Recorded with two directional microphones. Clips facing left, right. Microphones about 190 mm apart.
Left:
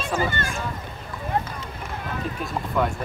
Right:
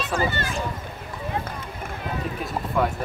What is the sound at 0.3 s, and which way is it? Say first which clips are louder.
Speech: even; 50° left (ahead or behind).